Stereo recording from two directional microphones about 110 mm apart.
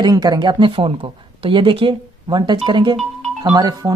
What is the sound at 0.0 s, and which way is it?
Speech, 40° right (ahead or behind).